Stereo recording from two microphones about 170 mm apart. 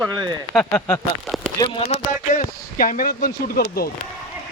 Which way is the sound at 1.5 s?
30° left (ahead or behind).